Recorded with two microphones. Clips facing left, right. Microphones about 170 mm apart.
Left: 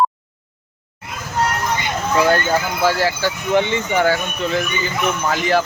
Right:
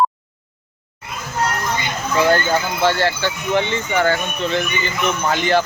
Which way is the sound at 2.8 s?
5° left (ahead or behind).